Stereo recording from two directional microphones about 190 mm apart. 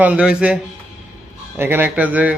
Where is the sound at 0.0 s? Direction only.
5° right (ahead or behind).